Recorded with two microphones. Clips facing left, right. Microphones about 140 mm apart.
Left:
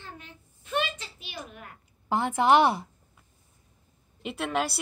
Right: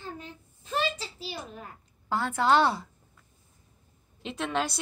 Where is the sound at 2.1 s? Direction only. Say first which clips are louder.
Left 3 dB; 20° left (ahead or behind).